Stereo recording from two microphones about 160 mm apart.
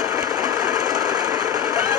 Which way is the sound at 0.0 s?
25° right (ahead or behind).